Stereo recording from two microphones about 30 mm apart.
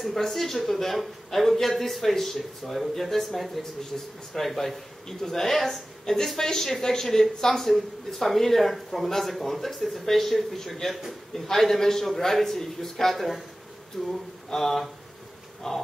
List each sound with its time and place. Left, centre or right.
0.1 s a man's voice: centre
5.0 s speech: centre
7.6 s a man's voice: centre